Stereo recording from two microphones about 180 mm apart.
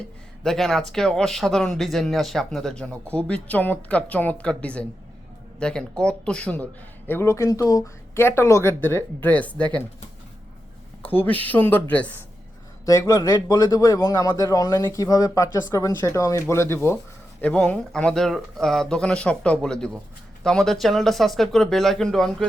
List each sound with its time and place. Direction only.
0.4 s a man's voice: centre (ahead or behind)
11.0 s a man's voice: 10° left (ahead or behind)